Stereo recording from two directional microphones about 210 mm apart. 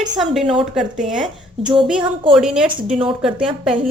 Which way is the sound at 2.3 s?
5° right (ahead or behind).